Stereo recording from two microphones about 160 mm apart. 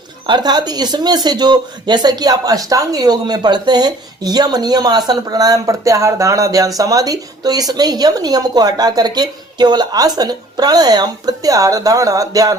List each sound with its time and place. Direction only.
0.3 s speech: 25° right (ahead or behind)